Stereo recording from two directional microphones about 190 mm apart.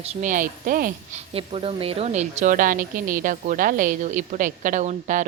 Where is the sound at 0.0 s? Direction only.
35° right (ahead or behind).